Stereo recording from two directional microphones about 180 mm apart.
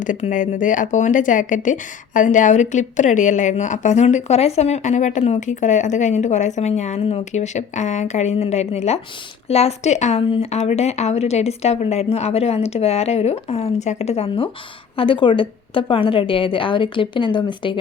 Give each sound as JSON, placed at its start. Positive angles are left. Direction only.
{"t": 0.0, "sound": "a woman's voice", "side_deg": 45}